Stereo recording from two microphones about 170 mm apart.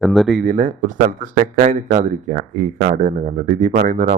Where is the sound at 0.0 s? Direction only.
Centre (ahead or behind).